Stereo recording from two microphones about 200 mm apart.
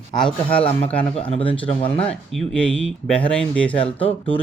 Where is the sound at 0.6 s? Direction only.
30° left (ahead or behind).